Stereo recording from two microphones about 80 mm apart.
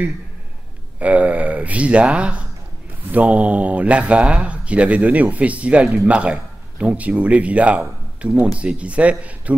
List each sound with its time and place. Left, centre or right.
0.9 s speech: centre